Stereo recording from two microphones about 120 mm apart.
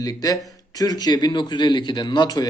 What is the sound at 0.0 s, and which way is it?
Speech, 30° left (ahead or behind).